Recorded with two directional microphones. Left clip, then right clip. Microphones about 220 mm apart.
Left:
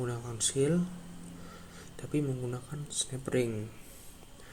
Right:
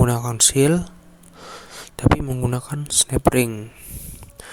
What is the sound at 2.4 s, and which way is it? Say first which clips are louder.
A man's voice: right 13 dB; 45° right (ahead or behind).